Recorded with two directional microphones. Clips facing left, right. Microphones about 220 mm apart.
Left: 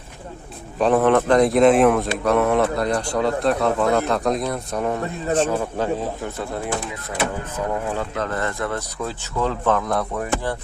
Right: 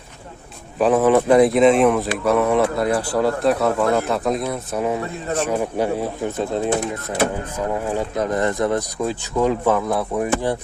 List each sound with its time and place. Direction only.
0.8 s a man's voice: 5° right (ahead or behind); by 6.7 s 20° right (ahead or behind)
7.9 s speech: 15° right (ahead or behind)